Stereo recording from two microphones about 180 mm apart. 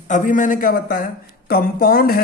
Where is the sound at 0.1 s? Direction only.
45° left (ahead or behind).